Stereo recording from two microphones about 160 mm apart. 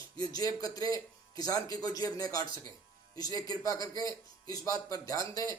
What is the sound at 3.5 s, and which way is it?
Speech, 25° left (ahead or behind).